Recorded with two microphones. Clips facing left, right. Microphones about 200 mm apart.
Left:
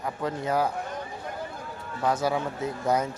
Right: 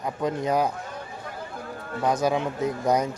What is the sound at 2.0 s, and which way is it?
Speech, 15° right (ahead or behind).